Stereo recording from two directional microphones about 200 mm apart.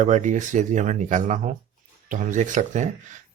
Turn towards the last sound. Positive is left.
turn(degrees=-40)  # may be behind; listen again after turning